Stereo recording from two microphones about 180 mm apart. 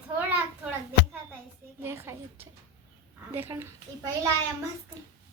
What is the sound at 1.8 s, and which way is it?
A woman's voice, 15° right (ahead or behind).